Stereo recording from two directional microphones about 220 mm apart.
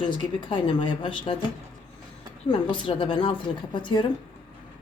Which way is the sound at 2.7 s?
20° left (ahead or behind).